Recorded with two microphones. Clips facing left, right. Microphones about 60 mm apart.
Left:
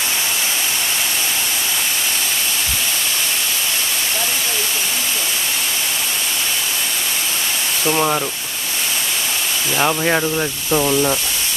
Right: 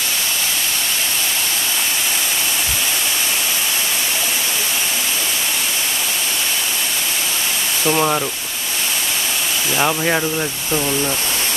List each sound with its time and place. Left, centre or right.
7.8 s speech: centre
9.8 s speech: centre
10.7 s speech: centre